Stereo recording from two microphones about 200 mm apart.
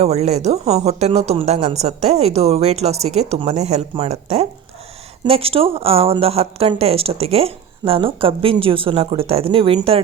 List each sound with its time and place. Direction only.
0.0 s speech: 35° right (ahead or behind)